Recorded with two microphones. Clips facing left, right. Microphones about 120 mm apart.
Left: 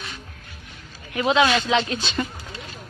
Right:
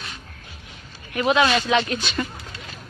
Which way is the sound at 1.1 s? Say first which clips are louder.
Even; 20° left (ahead or behind).